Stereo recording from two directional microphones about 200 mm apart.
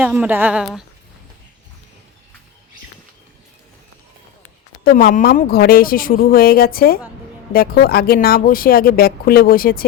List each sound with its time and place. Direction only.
0.0 s a woman's voice: 5° right (ahead or behind)
4.8 s speech: 50° left (ahead or behind)